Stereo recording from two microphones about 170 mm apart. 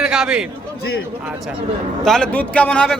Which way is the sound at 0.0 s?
5° right (ahead or behind).